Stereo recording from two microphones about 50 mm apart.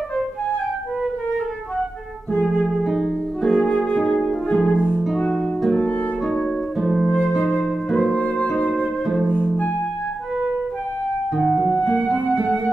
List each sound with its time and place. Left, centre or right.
2.6 s music: centre
3.4 s music: centre
7.5 s music: left
11.8 s music: left